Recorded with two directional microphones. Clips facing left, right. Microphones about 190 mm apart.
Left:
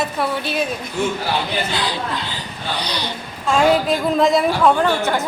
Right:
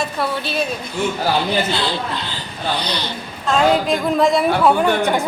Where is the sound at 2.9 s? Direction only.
10° left (ahead or behind).